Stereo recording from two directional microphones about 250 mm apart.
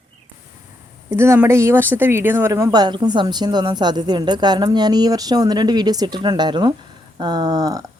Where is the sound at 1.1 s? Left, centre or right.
Centre.